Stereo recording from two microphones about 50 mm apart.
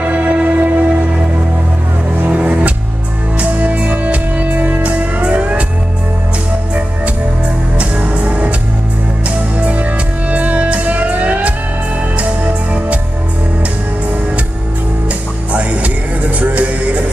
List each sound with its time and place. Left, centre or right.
0.0 s music: right
2.2 s music: right
7.8 s music: right
9.6 s music: right
15.5 s music: right